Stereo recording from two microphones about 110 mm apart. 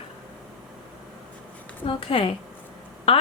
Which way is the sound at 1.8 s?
55° left (ahead or behind).